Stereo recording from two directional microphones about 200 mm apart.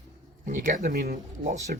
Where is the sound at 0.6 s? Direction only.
40° right (ahead or behind).